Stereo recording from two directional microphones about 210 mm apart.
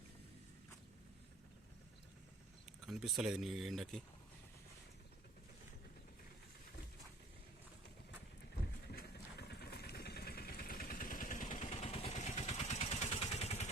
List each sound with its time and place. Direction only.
2.8 s speech: centre (ahead or behind)
8.9 s vehicle: 50° left (ahead or behind); by 13.7 s 30° left (ahead or behind)